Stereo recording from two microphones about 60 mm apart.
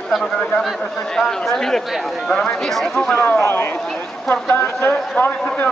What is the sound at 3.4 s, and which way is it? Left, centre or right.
Speech, left.